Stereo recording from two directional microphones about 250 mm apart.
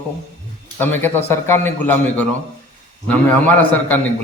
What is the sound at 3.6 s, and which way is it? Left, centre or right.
Speech, centre.